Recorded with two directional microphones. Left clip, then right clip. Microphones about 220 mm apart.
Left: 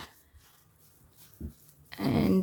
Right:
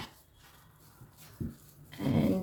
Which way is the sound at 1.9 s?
40° left (ahead or behind).